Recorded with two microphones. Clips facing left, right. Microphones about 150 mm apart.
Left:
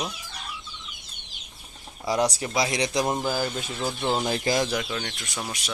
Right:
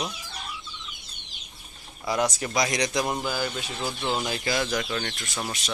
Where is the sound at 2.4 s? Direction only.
20° left (ahead or behind).